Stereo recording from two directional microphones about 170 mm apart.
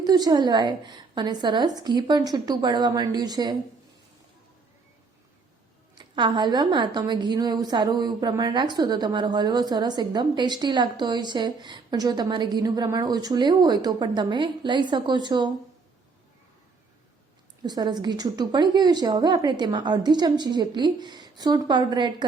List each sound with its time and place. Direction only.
0.0 s a woman's voice: 25° right (ahead or behind)
6.0 s a woman's voice: 25° right (ahead or behind)
17.6 s a woman's voice: 25° right (ahead or behind)